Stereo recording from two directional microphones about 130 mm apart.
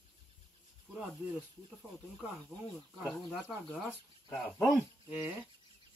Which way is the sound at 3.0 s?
Centre (ahead or behind).